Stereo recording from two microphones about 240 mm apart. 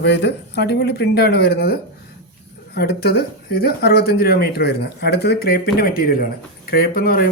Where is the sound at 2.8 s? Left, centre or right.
Left.